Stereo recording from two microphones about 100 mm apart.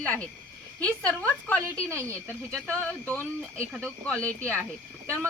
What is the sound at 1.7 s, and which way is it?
Speech, 30° right (ahead or behind).